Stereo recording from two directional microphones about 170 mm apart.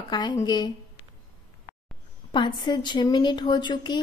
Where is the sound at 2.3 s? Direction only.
30° left (ahead or behind).